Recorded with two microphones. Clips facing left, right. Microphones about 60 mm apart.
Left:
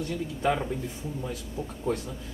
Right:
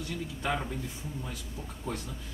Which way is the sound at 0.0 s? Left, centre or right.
Centre.